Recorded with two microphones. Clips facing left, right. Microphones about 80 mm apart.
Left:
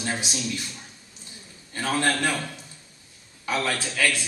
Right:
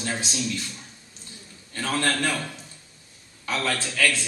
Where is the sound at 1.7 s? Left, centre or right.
Centre.